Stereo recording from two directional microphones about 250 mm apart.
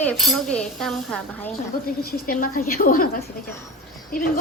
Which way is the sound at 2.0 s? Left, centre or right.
Left.